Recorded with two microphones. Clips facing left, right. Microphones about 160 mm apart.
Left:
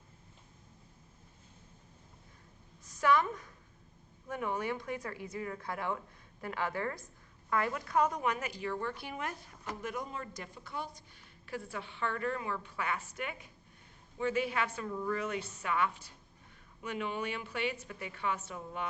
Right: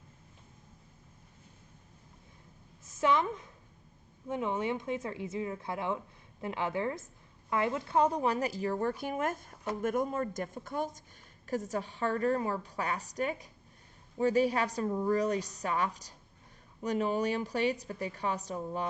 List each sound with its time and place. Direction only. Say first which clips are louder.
2.8 s a woman's voice: right 1 dB; 25° right (ahead or behind)